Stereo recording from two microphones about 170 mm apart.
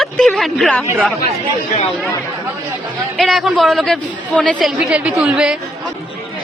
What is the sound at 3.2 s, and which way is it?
A woman's voice, centre (ahead or behind).